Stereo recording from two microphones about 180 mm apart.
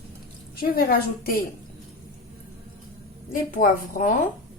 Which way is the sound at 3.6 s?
45° left (ahead or behind).